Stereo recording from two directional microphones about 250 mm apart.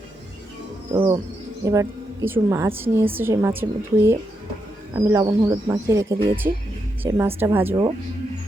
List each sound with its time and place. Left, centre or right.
0.9 s a woman's voice: centre